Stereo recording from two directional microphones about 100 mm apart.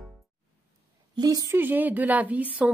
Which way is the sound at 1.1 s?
40° right (ahead or behind).